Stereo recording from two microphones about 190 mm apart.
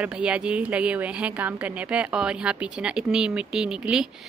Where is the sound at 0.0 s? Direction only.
5° right (ahead or behind).